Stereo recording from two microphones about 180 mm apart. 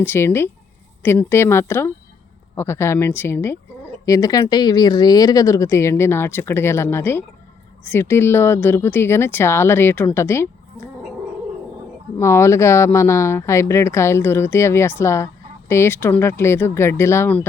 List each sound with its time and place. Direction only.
0.0 s speech: 10° left (ahead or behind)
12.2 s speech: 15° left (ahead or behind)